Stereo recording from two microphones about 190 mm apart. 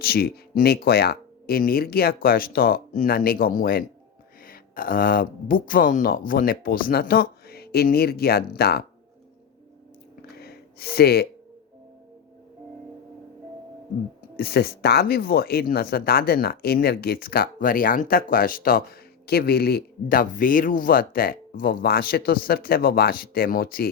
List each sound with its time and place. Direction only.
0.0 s speech: 55° left (ahead or behind)
10.3 s a sound: 55° left (ahead or behind)
14.3 s speech: 55° left (ahead or behind)